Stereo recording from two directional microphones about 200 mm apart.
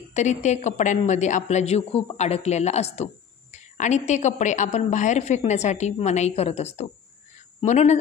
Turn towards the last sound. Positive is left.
turn(degrees=35)  # may be behind; listen again after turning